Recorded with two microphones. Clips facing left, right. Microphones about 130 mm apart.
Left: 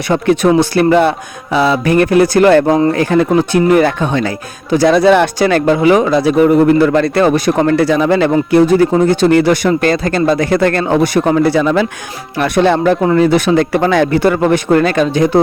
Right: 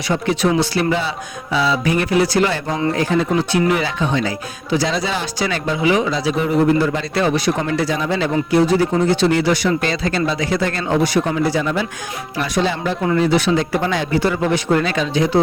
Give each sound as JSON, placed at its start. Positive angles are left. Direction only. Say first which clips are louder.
{"t": 0.1, "sound": "speech", "louder": "left 7 dB", "side_deg": 55}
{"t": 12.4, "sound": "speech", "louder": "left 9 dB", "side_deg": 60}